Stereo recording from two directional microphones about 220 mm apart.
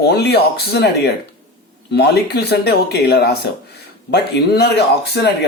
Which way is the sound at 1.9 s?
50° left (ahead or behind).